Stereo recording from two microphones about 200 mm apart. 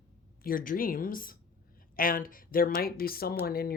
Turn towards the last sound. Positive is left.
turn(degrees=50)  # may be behind; listen again after turning